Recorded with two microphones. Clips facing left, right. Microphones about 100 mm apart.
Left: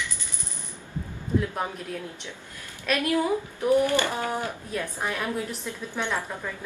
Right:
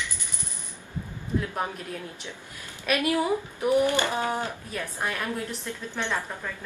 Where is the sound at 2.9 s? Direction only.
15° right (ahead or behind).